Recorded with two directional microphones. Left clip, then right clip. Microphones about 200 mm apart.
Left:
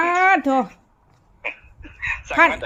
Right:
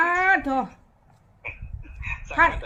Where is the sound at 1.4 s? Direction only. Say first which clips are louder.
Left 7 dB; 50° left (ahead or behind).